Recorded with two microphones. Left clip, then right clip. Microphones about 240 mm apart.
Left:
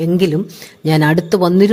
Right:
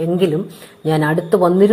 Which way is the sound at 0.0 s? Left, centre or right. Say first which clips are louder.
Left 1 dB; left.